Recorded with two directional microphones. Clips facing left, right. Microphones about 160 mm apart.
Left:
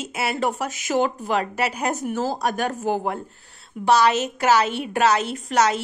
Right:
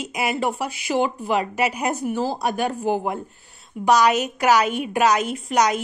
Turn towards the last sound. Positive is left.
turn(degrees=-15)  # may be behind; listen again after turning